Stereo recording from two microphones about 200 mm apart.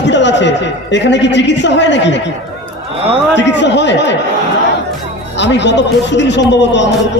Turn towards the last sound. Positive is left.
turn(degrees=60)  # may be behind; listen again after turning